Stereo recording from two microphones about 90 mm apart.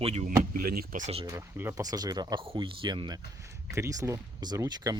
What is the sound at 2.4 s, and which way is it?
Speech, 70° right (ahead or behind).